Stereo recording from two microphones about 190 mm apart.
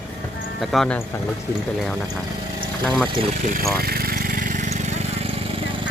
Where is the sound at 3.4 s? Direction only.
45° right (ahead or behind).